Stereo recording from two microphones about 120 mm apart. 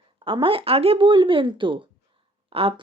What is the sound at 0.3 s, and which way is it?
Speech, 45° right (ahead or behind).